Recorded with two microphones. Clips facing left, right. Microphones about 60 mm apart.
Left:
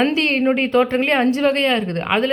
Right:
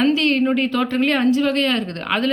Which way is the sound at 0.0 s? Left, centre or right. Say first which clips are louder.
Even; left.